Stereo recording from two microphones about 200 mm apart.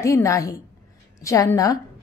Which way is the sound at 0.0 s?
15° left (ahead or behind).